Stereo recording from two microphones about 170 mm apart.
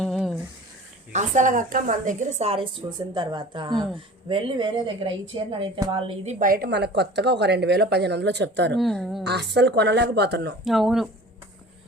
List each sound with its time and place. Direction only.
0.0 s a sound: centre (ahead or behind)
1.1 s a woman's voice: 45° right (ahead or behind)
6.4 s speech: 60° right (ahead or behind); by 8.8 s 90° right
8.8 s speech: centre (ahead or behind)
9.2 s speech: 80° right
10.6 s speech: centre (ahead or behind)